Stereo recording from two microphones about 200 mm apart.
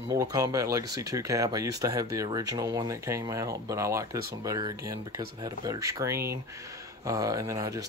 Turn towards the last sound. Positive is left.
turn(degrees=-15)  # may be behind; listen again after turning